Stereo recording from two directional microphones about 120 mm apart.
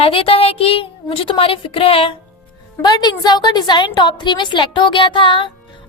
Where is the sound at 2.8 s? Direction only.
35° left (ahead or behind).